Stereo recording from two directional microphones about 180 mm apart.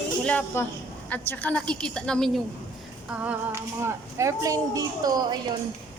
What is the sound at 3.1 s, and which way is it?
Speech, 10° right (ahead or behind).